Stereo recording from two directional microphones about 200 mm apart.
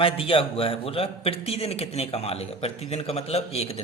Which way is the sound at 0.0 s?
25° left (ahead or behind).